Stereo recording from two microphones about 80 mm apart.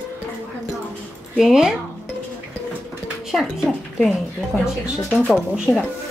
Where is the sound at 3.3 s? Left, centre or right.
Centre.